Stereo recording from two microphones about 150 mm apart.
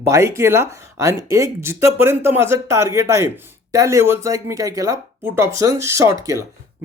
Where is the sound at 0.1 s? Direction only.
20° right (ahead or behind).